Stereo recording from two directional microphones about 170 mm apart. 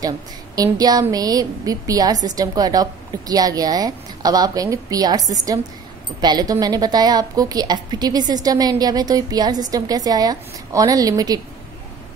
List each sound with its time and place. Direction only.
0.6 s a woman's voice: 20° right (ahead or behind)